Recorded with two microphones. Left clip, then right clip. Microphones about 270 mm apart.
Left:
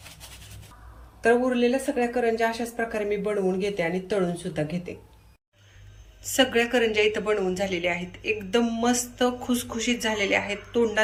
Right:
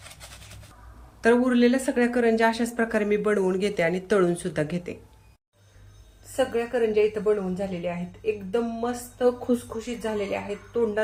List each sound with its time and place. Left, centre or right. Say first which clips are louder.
1.2 s a woman's voice: right 1 dB; centre
6.3 s a woman's voice: left 3 dB; right